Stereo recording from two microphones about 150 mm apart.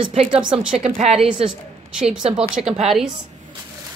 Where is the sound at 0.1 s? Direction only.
45° right (ahead or behind).